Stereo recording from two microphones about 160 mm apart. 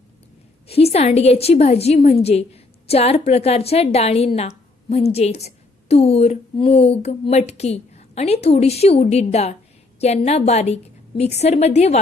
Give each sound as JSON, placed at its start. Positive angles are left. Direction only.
{"t": 0.7, "sound": "a woman's voice", "side_deg": 40}